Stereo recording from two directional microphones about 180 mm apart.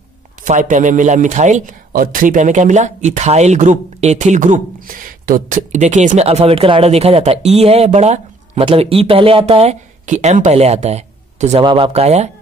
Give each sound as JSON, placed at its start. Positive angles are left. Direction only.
{"t": 0.5, "sound": "a man's voice", "side_deg": -45}
{"t": 11.6, "sound": "a man's voice", "side_deg": -30}